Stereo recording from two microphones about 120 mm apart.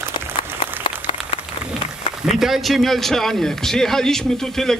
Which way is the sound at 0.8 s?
45° left (ahead or behind).